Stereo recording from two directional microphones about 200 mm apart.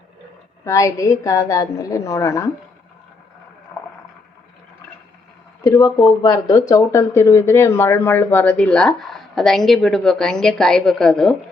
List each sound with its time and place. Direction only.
0.6 s a woman's voice: 15° left (ahead or behind)
5.6 s speech: 15° left (ahead or behind)